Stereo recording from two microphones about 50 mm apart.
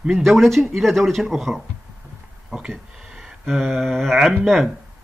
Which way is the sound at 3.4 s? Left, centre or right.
Centre.